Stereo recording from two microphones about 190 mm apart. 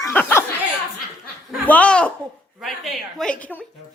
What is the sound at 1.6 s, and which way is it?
Speech, 5° left (ahead or behind).